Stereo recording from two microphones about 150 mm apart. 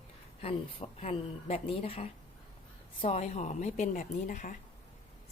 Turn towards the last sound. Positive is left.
turn(degrees=60)  # may be behind; listen again after turning